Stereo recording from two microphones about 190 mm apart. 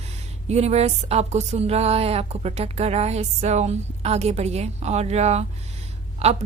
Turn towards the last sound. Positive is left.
turn(degrees=-35)  # may be behind; listen again after turning